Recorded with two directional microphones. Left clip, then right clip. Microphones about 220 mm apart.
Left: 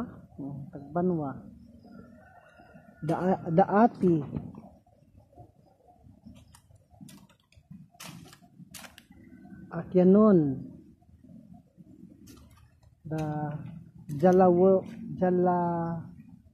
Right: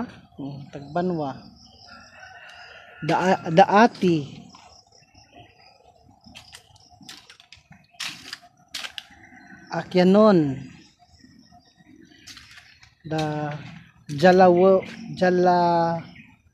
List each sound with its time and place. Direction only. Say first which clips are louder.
0.7 s speech: right 4 dB; 40° right (ahead or behind)
3.1 s a man's voice: right 8 dB; 55° right (ahead or behind)
9.7 s speech: right 4 dB; 50° right (ahead or behind)
13.2 s a man's voice: right 7 dB; 60° right (ahead or behind)